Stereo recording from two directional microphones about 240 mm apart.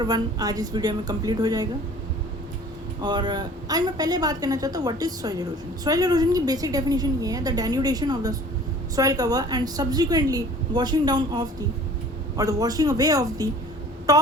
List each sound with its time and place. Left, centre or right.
0.0 s a woman's voice: centre
3.0 s a woman's voice: centre